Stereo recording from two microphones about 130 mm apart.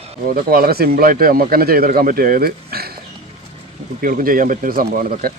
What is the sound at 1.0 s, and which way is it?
Speech, 90° right.